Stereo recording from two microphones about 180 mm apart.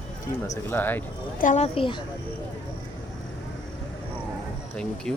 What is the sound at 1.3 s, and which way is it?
Speech, 45° left (ahead or behind).